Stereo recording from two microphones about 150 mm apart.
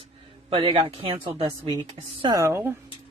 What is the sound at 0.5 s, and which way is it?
Speech, 35° right (ahead or behind).